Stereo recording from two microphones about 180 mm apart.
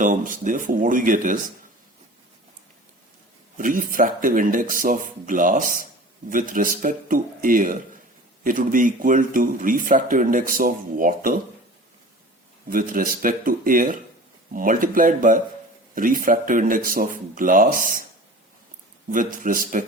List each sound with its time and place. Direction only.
0.0 s speech: 45° right (ahead or behind)
3.6 s speech: 50° right (ahead or behind)
12.7 s speech: 50° right (ahead or behind)
19.1 s speech: 50° right (ahead or behind)